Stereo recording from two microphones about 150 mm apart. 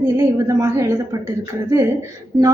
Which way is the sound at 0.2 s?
25° right (ahead or behind).